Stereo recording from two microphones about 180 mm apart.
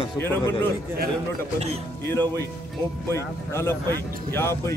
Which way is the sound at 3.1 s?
15° left (ahead or behind).